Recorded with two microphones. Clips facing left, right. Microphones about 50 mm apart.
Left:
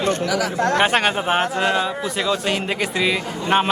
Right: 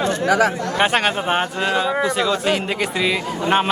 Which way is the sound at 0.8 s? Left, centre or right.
Centre.